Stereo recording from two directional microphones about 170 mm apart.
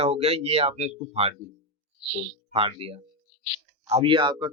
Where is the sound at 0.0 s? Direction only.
40° right (ahead or behind).